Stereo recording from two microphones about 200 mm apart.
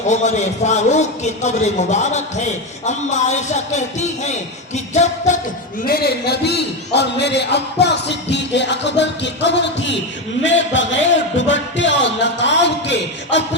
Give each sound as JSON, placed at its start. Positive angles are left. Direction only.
{"t": 0.1, "sound": "a man's voice", "side_deg": 35}
{"t": 5.8, "sound": "a man's voice", "side_deg": 50}